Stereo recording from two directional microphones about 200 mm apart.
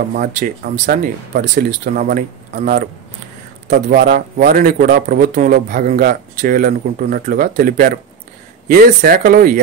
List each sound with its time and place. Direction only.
0.2 s speech: 40° right (ahead or behind)
3.9 s speech: 45° right (ahead or behind)